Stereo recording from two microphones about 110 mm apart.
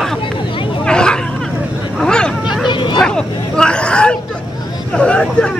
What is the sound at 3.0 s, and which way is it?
Hubbub, 5° left (ahead or behind).